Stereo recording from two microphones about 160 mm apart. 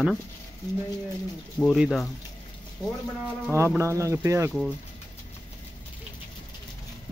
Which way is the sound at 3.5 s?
15° right (ahead or behind).